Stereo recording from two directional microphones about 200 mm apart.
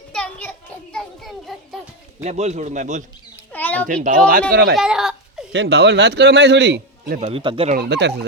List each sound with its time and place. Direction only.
0.1 s children playing: 5° left (ahead or behind)
2.2 s a man's voice: 35° right (ahead or behind)
3.5 s a child's voice: 10° left (ahead or behind)
3.8 s a man's voice: 40° right (ahead or behind)
4.7 s a sound: centre (ahead or behind)
5.5 s a man's voice: 60° right (ahead or behind)
7.2 s speech: 30° right (ahead or behind)
7.8 s a man's voice: 55° right (ahead or behind)